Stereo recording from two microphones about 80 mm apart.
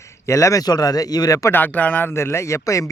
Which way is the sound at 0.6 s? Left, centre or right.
Left.